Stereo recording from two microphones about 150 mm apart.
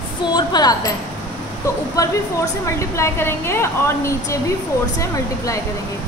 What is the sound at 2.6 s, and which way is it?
A woman's voice, 20° left (ahead or behind).